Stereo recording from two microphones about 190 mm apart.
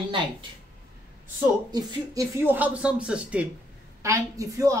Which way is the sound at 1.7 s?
20° right (ahead or behind).